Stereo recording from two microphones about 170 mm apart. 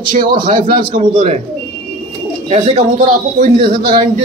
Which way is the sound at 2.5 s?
40° right (ahead or behind).